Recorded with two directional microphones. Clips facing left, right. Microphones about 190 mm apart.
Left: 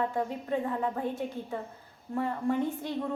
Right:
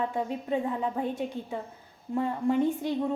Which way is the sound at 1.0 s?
15° right (ahead or behind).